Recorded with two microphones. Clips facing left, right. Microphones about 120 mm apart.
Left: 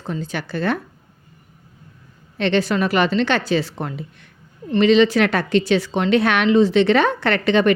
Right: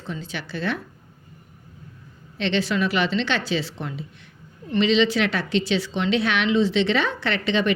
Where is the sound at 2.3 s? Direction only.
50° left (ahead or behind).